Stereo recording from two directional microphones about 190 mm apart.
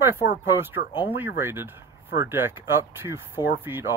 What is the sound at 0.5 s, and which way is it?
Speech, 10° right (ahead or behind).